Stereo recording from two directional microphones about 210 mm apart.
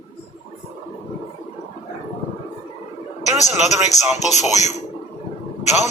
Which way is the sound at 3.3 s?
35° left (ahead or behind).